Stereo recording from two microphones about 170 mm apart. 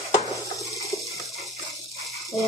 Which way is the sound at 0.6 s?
20° left (ahead or behind).